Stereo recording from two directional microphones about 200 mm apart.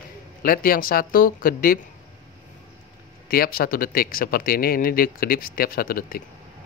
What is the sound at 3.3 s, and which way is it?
Speech, 50° left (ahead or behind).